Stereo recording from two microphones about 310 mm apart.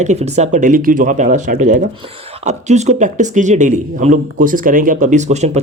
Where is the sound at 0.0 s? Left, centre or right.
Right.